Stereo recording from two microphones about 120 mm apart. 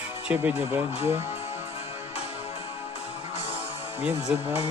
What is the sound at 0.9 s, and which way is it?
Speech, 60° left (ahead or behind).